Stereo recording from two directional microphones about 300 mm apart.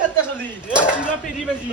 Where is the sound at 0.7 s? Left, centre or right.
Centre.